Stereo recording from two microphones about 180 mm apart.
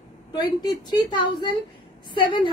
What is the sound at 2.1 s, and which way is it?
Speech, 25° left (ahead or behind).